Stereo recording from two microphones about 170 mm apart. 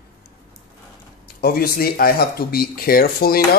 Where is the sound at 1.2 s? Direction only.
65° left (ahead or behind).